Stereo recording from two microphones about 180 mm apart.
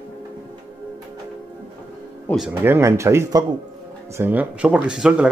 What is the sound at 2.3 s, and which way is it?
Speech, 10° right (ahead or behind).